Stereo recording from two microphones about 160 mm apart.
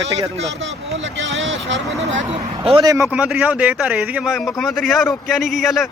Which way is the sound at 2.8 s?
20° right (ahead or behind).